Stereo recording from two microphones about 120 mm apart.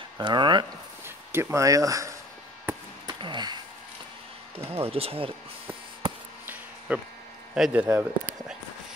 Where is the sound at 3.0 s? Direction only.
40° right (ahead or behind).